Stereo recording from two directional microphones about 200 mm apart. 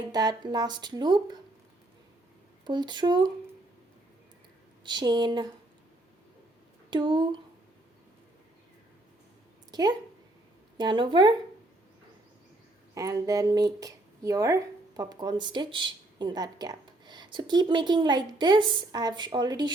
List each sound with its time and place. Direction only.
0.1 s speech: 20° right (ahead or behind)
2.6 s speech: 20° right (ahead or behind)
4.8 s speech: 20° right (ahead or behind)
6.9 s speech: 25° right (ahead or behind)
10.8 s speech: 20° right (ahead or behind)
12.9 s speech: 15° right (ahead or behind)